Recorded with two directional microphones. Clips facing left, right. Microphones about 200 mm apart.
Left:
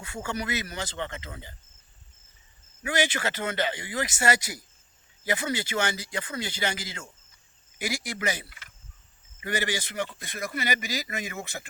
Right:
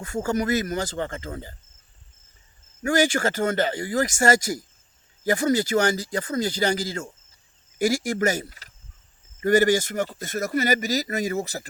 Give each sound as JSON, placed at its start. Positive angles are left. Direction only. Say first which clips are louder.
{"t": 0.0, "sound": "a man's voice", "louder": "right 8 dB", "side_deg": -45}
{"t": 2.8, "sound": "a man's voice", "louder": "right 7 dB", "side_deg": -45}